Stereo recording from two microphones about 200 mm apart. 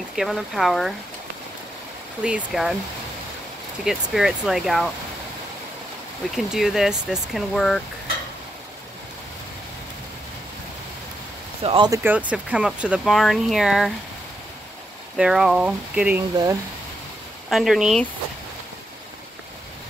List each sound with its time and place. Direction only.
0.1 s speech: centre (ahead or behind)
2.2 s speech: 5° right (ahead or behind)
3.8 s speech: centre (ahead or behind)
6.3 s speech: centre (ahead or behind)
11.6 s speech: 25° right (ahead or behind)
12.0 s speech: 10° right (ahead or behind)
15.1 s speech: 5° right (ahead or behind)
17.5 s speech: centre (ahead or behind)